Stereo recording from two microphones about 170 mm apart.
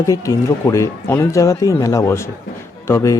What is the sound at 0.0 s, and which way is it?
A man's voice, 20° left (ahead or behind).